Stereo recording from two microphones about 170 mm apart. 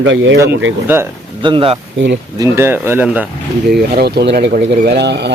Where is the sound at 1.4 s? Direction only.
30° right (ahead or behind).